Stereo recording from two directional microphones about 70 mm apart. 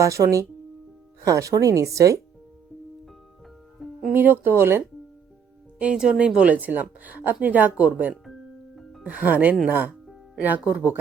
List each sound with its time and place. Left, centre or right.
0.0 s speech: right
4.1 s speech: right
5.8 s speech: centre
8.2 s music: centre
9.0 s speech: right